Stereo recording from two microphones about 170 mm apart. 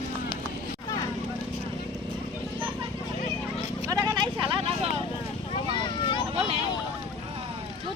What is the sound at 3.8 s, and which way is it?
Vehicle, 25° right (ahead or behind).